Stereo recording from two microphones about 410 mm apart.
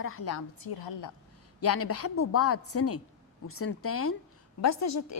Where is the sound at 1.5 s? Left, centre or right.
Left.